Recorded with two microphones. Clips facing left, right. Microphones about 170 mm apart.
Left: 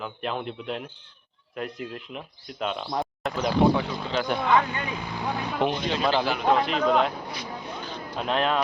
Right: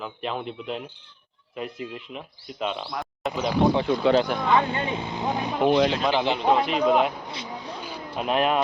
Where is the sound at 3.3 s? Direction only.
15° right (ahead or behind).